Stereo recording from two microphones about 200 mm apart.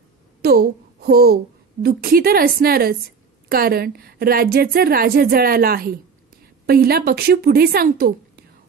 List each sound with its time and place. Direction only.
0.4 s a woman's voice: 50° right (ahead or behind)